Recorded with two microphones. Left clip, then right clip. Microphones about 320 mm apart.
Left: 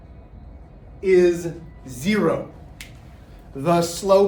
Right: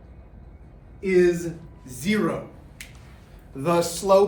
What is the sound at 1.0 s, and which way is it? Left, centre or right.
Speech, centre.